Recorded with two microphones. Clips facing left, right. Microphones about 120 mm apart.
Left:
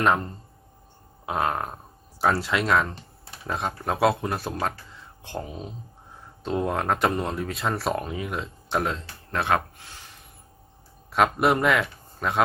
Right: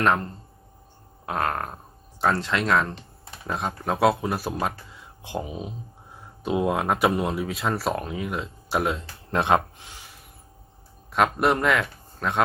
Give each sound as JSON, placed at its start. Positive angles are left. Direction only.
{"t": 0.0, "sound": "speech", "side_deg": 5}
{"t": 9.3, "sound": "speech", "side_deg": -20}
{"t": 11.1, "sound": "a man's voice", "side_deg": 0}